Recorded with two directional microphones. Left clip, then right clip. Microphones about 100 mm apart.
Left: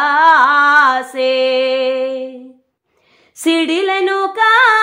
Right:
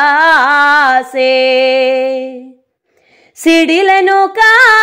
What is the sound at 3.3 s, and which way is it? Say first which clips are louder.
Female singing: right 6 dB; 35° right (ahead or behind).